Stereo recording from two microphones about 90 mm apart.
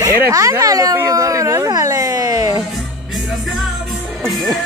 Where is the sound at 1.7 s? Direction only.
40° right (ahead or behind).